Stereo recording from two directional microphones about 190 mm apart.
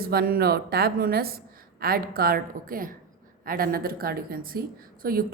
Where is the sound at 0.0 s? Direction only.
50° right (ahead or behind).